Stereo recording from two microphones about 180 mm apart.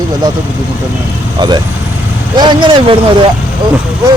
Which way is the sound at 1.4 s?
25° right (ahead or behind).